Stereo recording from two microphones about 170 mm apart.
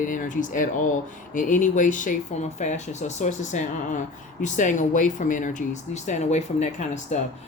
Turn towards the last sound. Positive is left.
turn(degrees=45)  # may be behind; listen again after turning